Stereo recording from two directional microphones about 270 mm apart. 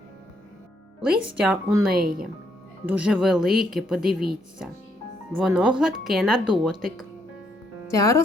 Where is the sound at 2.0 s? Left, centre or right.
Right.